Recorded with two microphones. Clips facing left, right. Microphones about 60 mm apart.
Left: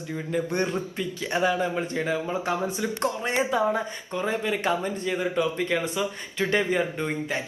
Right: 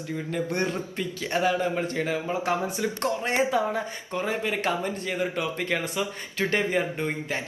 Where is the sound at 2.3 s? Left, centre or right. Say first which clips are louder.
Even; centre.